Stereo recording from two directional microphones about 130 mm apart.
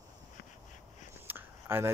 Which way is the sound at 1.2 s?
15° right (ahead or behind).